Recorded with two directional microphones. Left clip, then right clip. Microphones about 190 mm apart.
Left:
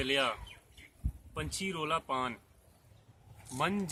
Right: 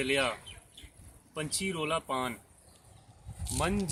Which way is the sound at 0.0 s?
Centre (ahead or behind).